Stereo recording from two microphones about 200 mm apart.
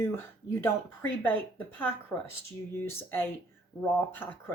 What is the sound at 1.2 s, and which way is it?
Speech, 10° left (ahead or behind).